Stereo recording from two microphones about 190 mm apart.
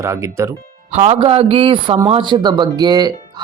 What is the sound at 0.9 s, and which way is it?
A man's voice, 35° right (ahead or behind).